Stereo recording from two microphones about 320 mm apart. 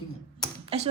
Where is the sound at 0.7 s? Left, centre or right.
Centre.